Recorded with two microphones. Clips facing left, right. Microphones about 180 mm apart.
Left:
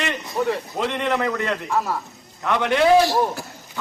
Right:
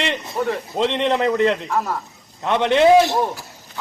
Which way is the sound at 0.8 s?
25° right (ahead or behind).